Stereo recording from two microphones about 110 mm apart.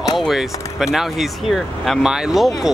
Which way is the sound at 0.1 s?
Centre (ahead or behind).